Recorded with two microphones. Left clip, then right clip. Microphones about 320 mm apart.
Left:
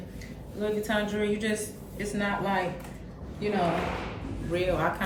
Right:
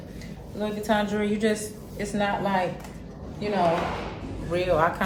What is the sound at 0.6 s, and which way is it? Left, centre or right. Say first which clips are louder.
A woman's voice: right 3 dB; centre.